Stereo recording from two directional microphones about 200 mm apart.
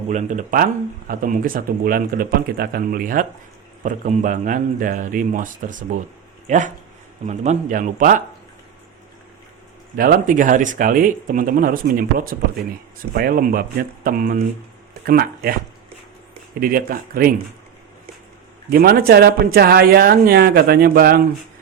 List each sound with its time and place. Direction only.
0.1 s a man's voice: 35° right (ahead or behind)
10.0 s speech: 45° right (ahead or behind)
16.6 s speech: 45° right (ahead or behind)
18.7 s speech: 50° right (ahead or behind)